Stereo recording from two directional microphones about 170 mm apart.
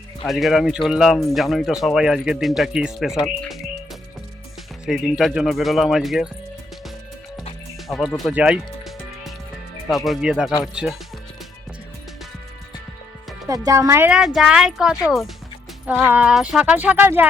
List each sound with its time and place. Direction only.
0.3 s speech: centre (ahead or behind)
4.9 s speech: centre (ahead or behind)
7.9 s music: centre (ahead or behind)
9.9 s speech: centre (ahead or behind)
13.7 s speech: 15° right (ahead or behind)
14.2 s speech: centre (ahead or behind)